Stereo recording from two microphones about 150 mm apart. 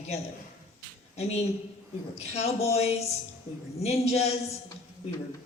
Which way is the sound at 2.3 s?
45° left (ahead or behind).